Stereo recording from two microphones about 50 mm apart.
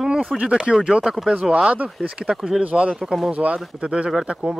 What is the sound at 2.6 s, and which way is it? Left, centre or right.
Speech, right.